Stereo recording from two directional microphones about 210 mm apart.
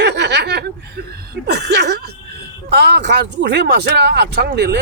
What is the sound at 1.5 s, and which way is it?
Speech, 55° right (ahead or behind).